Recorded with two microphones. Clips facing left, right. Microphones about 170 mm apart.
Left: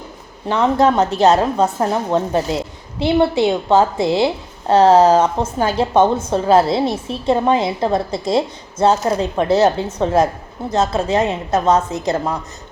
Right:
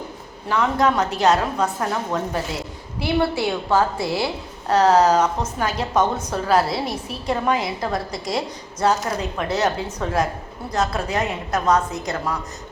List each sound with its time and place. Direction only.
0.4 s a woman's voice: 25° left (ahead or behind)